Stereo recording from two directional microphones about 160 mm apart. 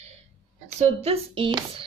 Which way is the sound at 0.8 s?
40° right (ahead or behind).